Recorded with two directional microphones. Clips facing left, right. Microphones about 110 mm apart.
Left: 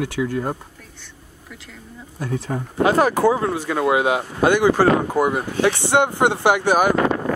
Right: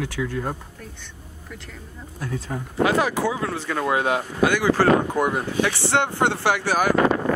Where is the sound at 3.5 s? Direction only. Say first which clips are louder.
Left 4 dB; 10° left (ahead or behind).